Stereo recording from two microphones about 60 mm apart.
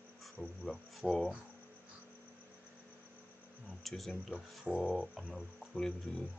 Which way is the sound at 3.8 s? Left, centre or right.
Centre.